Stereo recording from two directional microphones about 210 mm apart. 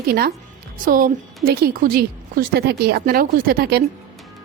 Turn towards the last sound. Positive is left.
turn(degrees=-50)  # may be behind; listen again after turning